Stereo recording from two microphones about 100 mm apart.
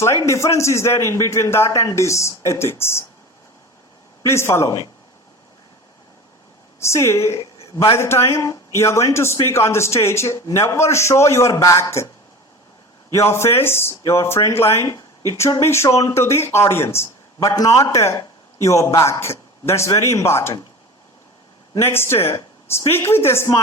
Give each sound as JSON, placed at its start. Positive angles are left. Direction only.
{"t": 0.3, "sound": "a man's voice", "side_deg": 30}
{"t": 4.2, "sound": "a man's voice", "side_deg": 25}
{"t": 6.7, "sound": "a woman's voice", "side_deg": 30}
{"t": 13.1, "sound": "a man's voice", "side_deg": 30}
{"t": 21.8, "sound": "a man's voice", "side_deg": 25}